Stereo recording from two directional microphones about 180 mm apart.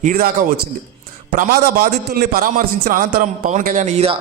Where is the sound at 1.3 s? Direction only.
50° right (ahead or behind).